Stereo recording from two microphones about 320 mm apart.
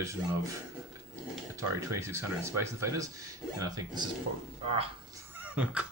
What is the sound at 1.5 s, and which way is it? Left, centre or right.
Speech, centre.